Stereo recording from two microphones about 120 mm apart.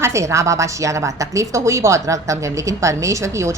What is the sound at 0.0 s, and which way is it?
A woman's voice, 25° right (ahead or behind).